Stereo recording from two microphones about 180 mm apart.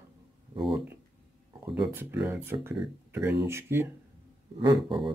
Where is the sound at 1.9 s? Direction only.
10° right (ahead or behind).